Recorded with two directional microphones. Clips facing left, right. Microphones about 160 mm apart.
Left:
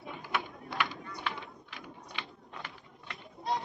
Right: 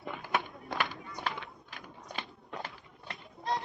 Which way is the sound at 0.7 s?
45° right (ahead or behind).